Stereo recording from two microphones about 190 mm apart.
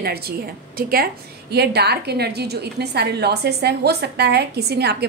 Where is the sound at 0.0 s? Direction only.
55° right (ahead or behind).